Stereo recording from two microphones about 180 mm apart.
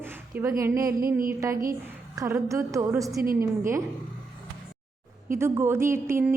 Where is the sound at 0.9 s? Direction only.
55° right (ahead or behind).